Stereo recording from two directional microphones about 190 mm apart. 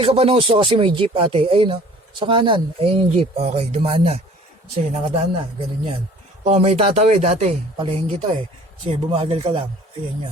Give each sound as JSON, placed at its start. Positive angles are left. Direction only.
{"t": 0.0, "sound": "speech", "side_deg": -30}
{"t": 6.4, "sound": "speech", "side_deg": -35}